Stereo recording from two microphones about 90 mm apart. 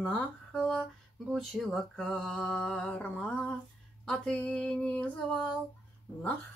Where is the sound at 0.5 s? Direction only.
5° left (ahead or behind).